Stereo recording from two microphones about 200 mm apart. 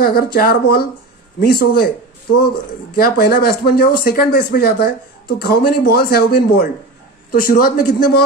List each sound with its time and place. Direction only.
0.0 s speech: 50° left (ahead or behind)
3.0 s speech: 50° left (ahead or behind)